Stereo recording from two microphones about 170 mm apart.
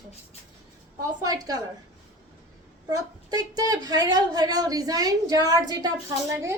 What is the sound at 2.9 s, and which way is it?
Speech, 20° right (ahead or behind).